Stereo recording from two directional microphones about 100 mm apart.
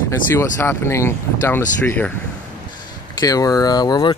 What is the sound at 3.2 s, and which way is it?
Speech, 35° left (ahead or behind).